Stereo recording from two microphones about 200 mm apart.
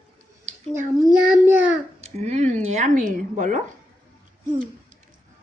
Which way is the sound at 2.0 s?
35° right (ahead or behind).